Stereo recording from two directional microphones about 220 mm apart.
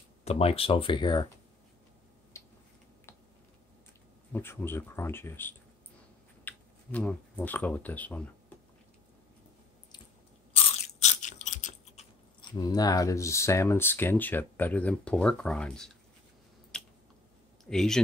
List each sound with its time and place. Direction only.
0.2 s speech: 25° left (ahead or behind)
2.3 s tick-tock: 15° left (ahead or behind)
4.3 s speech: 10° left (ahead or behind)
10.5 s crunch: 30° left (ahead or behind)
12.5 s speech: 15° left (ahead or behind)
16.7 s a sound: 5° left (ahead or behind)
17.6 s speech: centre (ahead or behind)